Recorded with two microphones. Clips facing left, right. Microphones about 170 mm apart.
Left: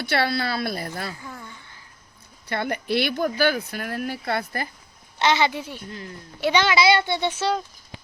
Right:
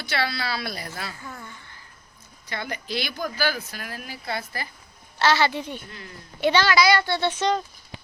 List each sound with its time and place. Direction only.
0.0 s a woman's voice: 55° left (ahead or behind)
2.5 s a woman's voice: 55° left (ahead or behind)
5.2 s a woman's voice: 20° left (ahead or behind)
6.5 s speech: 20° left (ahead or behind)
7.3 s speech: 5° left (ahead or behind)